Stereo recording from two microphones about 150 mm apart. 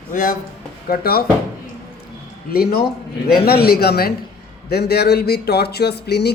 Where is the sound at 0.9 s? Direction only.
90° left.